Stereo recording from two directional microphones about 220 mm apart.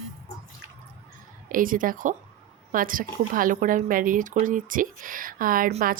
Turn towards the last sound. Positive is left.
turn(degrees=-40)  # may be behind; listen again after turning